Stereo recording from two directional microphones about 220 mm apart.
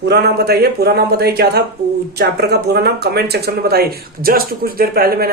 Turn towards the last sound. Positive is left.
turn(degrees=-40)  # may be behind; listen again after turning